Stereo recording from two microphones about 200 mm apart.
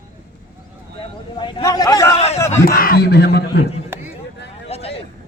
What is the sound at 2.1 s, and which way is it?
Speech, 30° left (ahead or behind).